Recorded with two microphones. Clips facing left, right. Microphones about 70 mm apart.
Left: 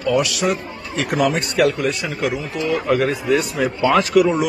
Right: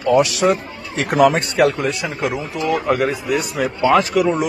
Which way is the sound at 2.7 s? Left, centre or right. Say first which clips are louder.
Even; centre.